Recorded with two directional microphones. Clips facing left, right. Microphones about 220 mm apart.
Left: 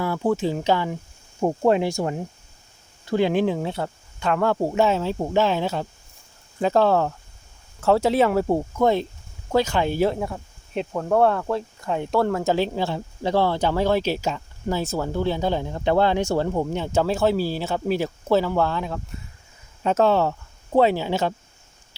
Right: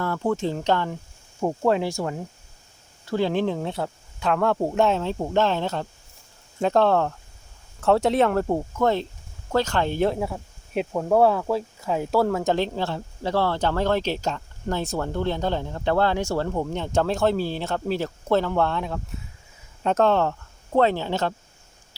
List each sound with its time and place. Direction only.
0.0 s speech: 10° left (ahead or behind)
1.4 s speech: 20° left (ahead or behind)